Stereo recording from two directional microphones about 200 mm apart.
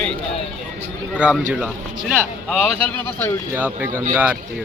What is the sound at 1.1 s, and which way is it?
Speech, 5° right (ahead or behind).